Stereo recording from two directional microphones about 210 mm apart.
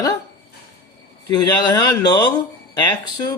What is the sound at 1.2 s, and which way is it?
Speech, 20° left (ahead or behind).